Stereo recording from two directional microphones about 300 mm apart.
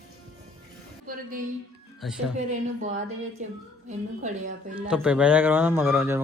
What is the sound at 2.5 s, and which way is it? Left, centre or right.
Speech, right.